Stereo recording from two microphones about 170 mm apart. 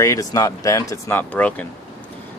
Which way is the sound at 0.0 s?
20° left (ahead or behind).